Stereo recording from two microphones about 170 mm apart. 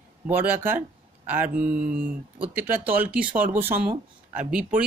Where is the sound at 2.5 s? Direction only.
10° right (ahead or behind).